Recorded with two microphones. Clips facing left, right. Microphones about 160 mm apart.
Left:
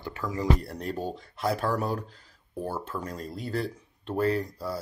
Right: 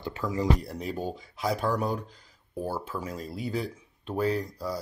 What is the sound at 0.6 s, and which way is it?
Speech, centre (ahead or behind).